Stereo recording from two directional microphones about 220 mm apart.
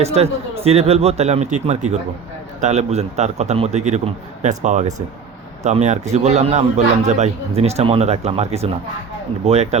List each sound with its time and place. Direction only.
0.0 s a man's voice: 30° right (ahead or behind)